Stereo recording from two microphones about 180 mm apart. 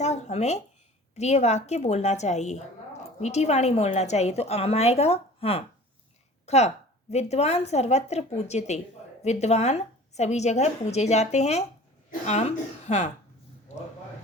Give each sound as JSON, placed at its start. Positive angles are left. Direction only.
{"t": 0.0, "sound": "a woman's voice", "side_deg": 40}
{"t": 6.4, "sound": "a sound", "side_deg": 35}
{"t": 7.1, "sound": "a woman's voice", "side_deg": 35}